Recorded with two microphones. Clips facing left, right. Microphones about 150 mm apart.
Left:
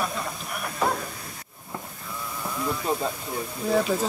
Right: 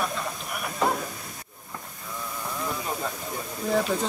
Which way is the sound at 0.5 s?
Centre (ahead or behind).